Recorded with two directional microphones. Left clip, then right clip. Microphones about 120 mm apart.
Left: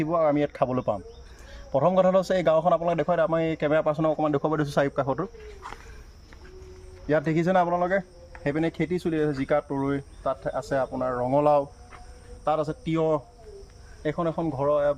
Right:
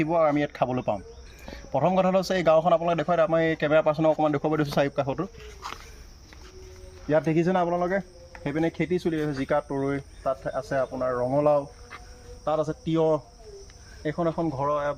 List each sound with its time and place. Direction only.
0.0 s a man's voice: 20° left (ahead or behind)
7.2 s speech: 25° left (ahead or behind)
10.4 s a man's voice: 25° left (ahead or behind)